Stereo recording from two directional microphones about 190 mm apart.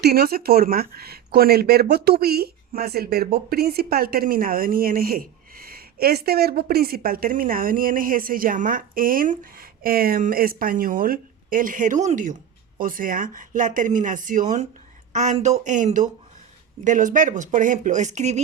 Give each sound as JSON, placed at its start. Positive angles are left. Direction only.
{"t": 0.0, "sound": "speech", "side_deg": -55}